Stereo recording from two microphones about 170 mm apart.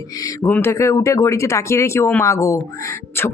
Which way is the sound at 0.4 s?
10° left (ahead or behind).